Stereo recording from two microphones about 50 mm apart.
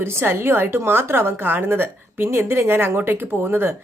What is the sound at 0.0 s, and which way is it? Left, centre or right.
Speech, right.